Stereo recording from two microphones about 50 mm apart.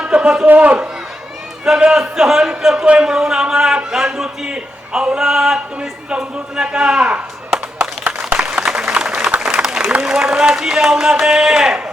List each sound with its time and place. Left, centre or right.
0.0 s a sound: right
0.4 s a man's voice: right
1.6 s speech: centre
2.8 s speech: right
8.6 s applause: centre
10.0 s speech: centre